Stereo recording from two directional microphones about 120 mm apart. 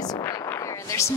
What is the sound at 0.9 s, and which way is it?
Speech, 25° left (ahead or behind).